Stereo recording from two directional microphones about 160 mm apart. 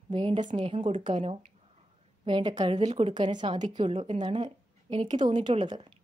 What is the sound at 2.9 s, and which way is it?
Speech, 45° right (ahead or behind).